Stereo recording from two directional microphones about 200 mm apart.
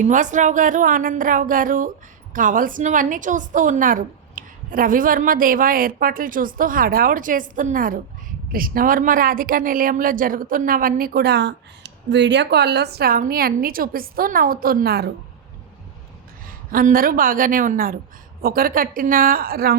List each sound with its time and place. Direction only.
0.0 s a woman's voice: 40° right (ahead or behind)
16.5 s a woman's voice: 45° right (ahead or behind)